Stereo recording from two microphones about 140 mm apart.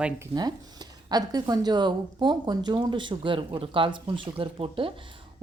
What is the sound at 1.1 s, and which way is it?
Speech, 30° right (ahead or behind).